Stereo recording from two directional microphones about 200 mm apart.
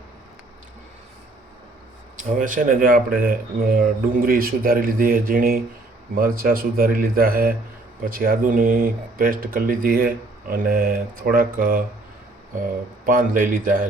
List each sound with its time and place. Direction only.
2.1 s speech: 40° right (ahead or behind)
13.1 s speech: 45° right (ahead or behind)